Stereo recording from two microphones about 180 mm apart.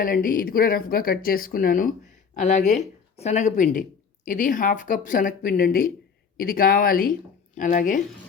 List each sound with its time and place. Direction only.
0.0 s speech: 50° left (ahead or behind)
2.3 s speech: 40° left (ahead or behind)